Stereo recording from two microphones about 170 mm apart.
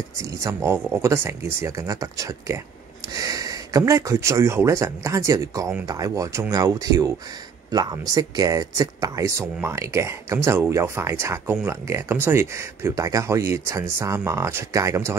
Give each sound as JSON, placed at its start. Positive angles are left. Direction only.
{"t": 0.2, "sound": "speech", "side_deg": -15}